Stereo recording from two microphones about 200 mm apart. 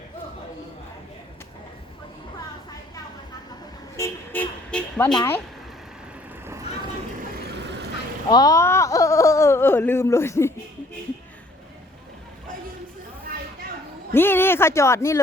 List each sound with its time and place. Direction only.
3.9 s vehicle: 10° left (ahead or behind)
5.1 s speech: 15° left (ahead or behind)
7.4 s vehicle: 60° right (ahead or behind)
8.3 s speech: 20° left (ahead or behind)
14.1 s speech: 10° left (ahead or behind)